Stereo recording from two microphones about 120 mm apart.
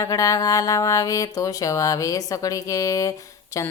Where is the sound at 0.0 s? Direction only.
30° left (ahead or behind).